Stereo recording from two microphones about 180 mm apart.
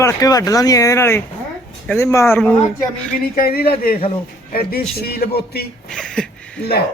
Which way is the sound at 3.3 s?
55° left (ahead or behind).